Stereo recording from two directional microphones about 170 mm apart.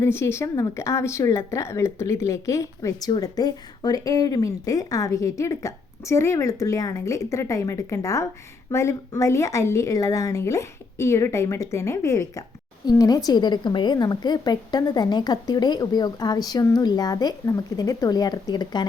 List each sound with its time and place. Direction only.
0.0 s a woman's voice: 15° left (ahead or behind)